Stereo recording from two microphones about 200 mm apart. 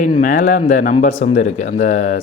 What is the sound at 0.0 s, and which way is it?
A man's voice, 40° left (ahead or behind).